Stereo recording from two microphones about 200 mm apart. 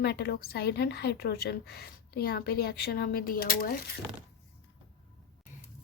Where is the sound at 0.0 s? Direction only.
55° left (ahead or behind).